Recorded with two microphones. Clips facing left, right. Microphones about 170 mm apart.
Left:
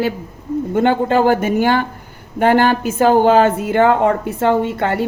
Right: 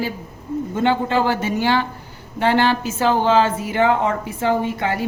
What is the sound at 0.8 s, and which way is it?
A woman's voice, 50° left (ahead or behind).